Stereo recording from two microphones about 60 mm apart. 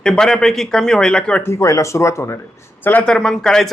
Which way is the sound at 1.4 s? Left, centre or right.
Left.